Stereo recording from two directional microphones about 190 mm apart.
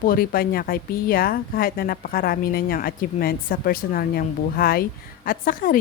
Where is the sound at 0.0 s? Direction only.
50° left (ahead or behind).